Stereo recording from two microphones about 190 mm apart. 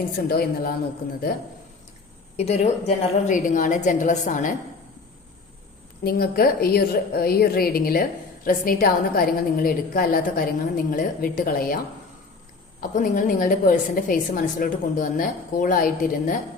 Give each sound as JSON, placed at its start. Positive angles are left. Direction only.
{"t": 0.2, "sound": "a woman's voice", "side_deg": 55}
{"t": 2.3, "sound": "a woman's voice", "side_deg": 35}
{"t": 6.0, "sound": "a woman's voice", "side_deg": 50}
{"t": 12.9, "sound": "a woman's voice", "side_deg": 45}